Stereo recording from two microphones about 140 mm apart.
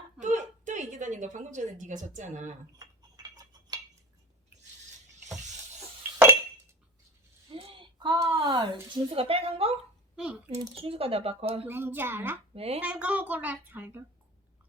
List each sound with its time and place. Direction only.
0.2 s a sound: 60° right (ahead or behind)
2.7 s cutlery: 25° right (ahead or behind)
6.0 s dishes: 15° right (ahead or behind)
7.5 s a sound: 35° right (ahead or behind)
8.2 s a woman's voice: 25° right (ahead or behind)
9.0 s speech: 40° right (ahead or behind)
11.7 s a woman's voice: 15° right (ahead or behind)
12.5 s speech: 45° right (ahead or behind)
12.8 s a woman's voice: 10° right (ahead or behind)